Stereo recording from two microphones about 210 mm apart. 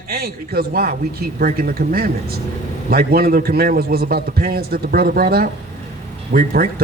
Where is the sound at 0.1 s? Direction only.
45° right (ahead or behind).